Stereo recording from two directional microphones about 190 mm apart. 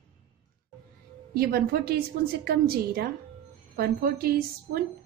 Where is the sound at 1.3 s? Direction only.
55° right (ahead or behind).